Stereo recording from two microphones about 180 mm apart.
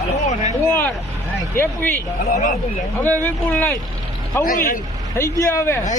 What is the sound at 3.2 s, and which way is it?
Speech, 10° left (ahead or behind).